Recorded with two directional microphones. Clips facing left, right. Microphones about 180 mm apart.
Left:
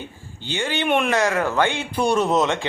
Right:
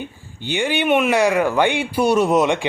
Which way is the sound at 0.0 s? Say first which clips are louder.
Right 5 dB; 15° right (ahead or behind).